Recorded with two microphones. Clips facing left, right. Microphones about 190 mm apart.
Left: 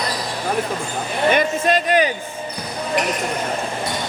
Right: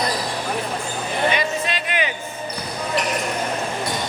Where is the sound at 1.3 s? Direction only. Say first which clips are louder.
Left 6 dB; 50° left (ahead or behind).